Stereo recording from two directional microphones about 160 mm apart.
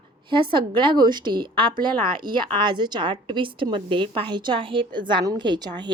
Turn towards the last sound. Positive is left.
turn(degrees=-30)  # may be behind; listen again after turning